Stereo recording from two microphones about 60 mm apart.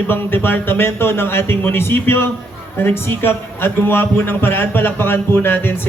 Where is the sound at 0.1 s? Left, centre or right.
Left.